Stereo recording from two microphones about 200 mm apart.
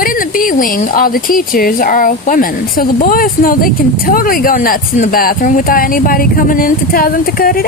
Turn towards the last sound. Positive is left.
turn(degrees=50)  # may be behind; listen again after turning